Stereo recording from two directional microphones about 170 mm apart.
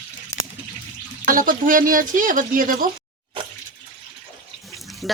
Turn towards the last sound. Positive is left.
turn(degrees=0)  # may be behind; listen again after turning